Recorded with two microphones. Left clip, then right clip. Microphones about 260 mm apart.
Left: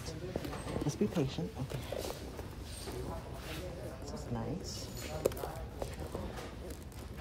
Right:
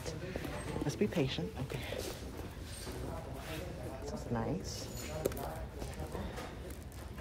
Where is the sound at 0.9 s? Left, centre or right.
Centre.